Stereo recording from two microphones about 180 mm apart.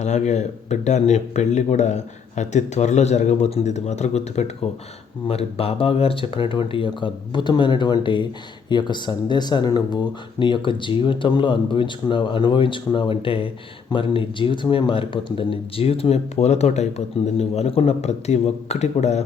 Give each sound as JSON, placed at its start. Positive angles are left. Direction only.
{"t": 0.0, "sound": "speech", "side_deg": 40}